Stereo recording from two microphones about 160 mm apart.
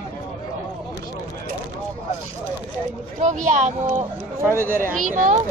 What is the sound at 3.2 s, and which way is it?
Speech, 50° right (ahead or behind).